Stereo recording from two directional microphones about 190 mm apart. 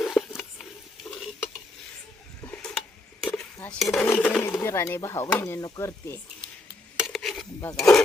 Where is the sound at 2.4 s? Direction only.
10° left (ahead or behind).